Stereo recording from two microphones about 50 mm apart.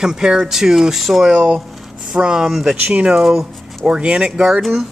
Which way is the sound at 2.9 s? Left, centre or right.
Right.